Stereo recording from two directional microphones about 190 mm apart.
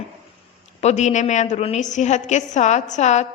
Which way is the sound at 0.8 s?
35° left (ahead or behind).